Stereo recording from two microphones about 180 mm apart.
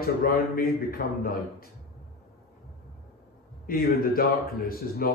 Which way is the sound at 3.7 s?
55° left (ahead or behind).